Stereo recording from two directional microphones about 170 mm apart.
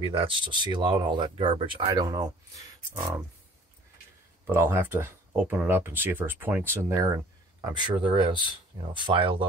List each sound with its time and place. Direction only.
0.0 s speech: 35° right (ahead or behind)
4.5 s speech: 15° right (ahead or behind); by 9.5 s 30° right (ahead or behind)